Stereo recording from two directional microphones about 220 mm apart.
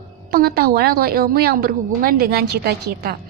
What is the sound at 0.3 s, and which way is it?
A woman's voice, 45° right (ahead or behind).